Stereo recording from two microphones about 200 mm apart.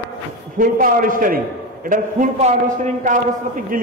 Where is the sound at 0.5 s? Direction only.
45° right (ahead or behind).